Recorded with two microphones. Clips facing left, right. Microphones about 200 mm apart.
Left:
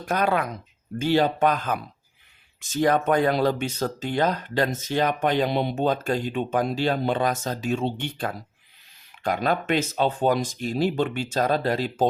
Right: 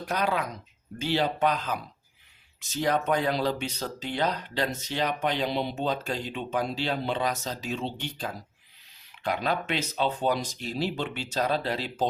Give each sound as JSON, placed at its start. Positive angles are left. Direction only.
{"t": 0.0, "sound": "speech", "side_deg": 50}